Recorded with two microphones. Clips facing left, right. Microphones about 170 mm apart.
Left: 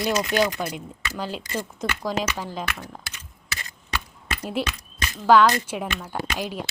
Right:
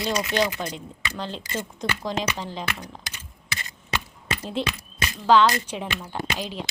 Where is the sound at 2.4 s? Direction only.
10° left (ahead or behind).